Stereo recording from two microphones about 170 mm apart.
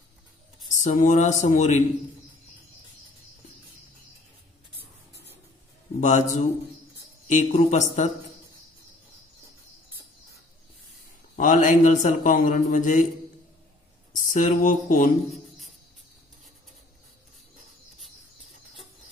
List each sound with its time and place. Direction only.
0.7 s speech: 45° left (ahead or behind)
5.9 s a man's voice: 45° left (ahead or behind)
7.2 s speech: 45° left (ahead or behind)
11.3 s speech: 50° left (ahead or behind)
14.1 s speech: 50° left (ahead or behind)